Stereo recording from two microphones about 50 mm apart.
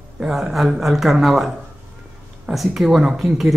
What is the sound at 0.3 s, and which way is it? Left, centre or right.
Speech, centre.